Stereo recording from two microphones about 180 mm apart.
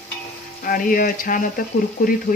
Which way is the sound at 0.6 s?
50° left (ahead or behind).